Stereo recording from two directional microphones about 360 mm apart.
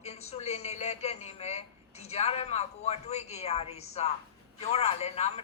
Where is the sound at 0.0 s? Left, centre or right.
Centre.